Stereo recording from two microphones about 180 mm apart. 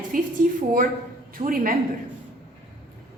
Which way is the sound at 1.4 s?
50° right (ahead or behind).